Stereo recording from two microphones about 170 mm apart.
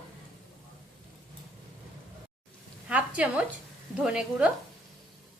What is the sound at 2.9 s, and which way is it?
A woman's voice, 10° right (ahead or behind).